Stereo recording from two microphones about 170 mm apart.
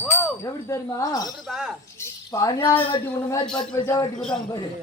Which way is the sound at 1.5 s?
5° right (ahead or behind).